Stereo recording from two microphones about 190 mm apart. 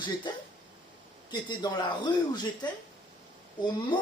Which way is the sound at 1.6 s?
20° left (ahead or behind).